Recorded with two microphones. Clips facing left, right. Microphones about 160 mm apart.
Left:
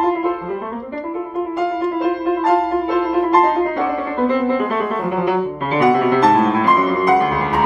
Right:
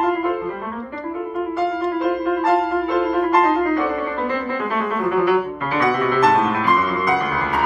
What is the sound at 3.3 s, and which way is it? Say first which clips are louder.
Music: left 3 dB; 25° left (ahead or behind).